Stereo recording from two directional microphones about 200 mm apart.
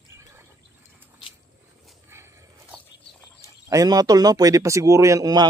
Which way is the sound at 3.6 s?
15° right (ahead or behind).